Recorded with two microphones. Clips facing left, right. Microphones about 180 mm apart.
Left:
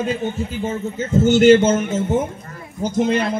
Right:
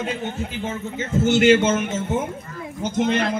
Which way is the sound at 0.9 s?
40° left (ahead or behind).